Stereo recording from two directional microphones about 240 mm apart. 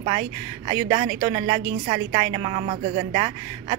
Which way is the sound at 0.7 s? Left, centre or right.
Centre.